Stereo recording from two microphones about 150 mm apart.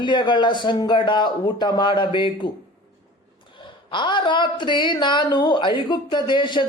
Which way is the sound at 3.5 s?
30° left (ahead or behind).